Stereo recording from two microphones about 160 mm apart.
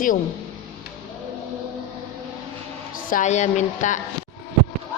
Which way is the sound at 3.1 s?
45° left (ahead or behind).